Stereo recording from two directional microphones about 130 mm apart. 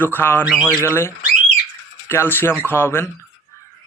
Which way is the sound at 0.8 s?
20° left (ahead or behind).